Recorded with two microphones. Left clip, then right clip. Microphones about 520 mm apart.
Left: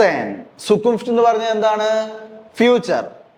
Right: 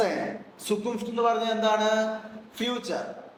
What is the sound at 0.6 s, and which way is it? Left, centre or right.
A man's voice, left.